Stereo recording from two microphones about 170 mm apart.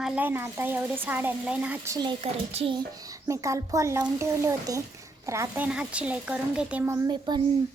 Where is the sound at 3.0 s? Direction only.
20° right (ahead or behind).